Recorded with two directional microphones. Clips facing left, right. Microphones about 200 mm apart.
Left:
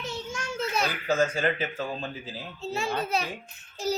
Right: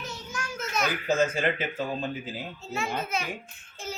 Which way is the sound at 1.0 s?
20° right (ahead or behind).